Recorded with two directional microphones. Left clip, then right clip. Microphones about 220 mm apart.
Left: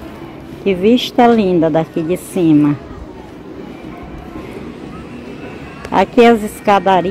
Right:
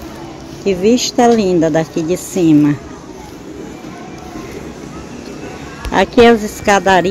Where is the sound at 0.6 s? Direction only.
Centre (ahead or behind).